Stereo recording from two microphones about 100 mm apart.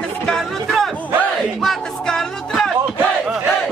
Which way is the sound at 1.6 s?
5° left (ahead or behind).